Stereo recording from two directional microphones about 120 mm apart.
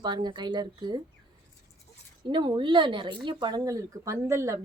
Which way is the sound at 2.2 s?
40° right (ahead or behind).